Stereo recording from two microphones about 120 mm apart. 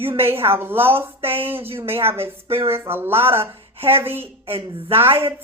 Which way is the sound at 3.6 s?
55° right (ahead or behind).